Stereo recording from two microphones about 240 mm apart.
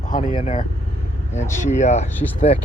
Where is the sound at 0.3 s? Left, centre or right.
Left.